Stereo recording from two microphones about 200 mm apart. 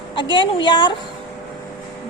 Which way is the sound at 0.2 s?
25° left (ahead or behind).